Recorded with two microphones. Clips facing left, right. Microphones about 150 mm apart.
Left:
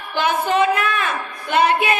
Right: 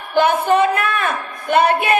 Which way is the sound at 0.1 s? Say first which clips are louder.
Right 5 dB; 55° right (ahead or behind).